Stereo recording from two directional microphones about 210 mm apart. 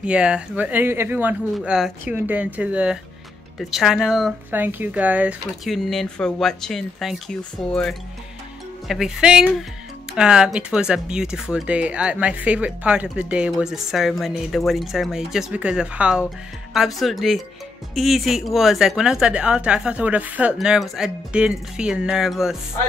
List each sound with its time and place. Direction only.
0.0 s speech: 5° right (ahead or behind)